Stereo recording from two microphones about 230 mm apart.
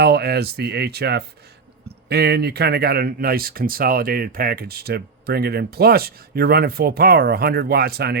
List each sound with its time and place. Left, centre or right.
0.0 s speech: right